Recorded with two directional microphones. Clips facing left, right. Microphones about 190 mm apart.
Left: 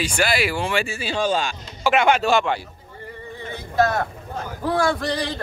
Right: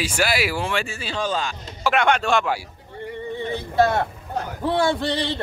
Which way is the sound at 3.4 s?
25° right (ahead or behind).